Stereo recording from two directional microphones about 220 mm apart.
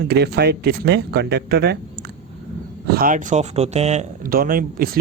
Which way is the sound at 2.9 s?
40° right (ahead or behind).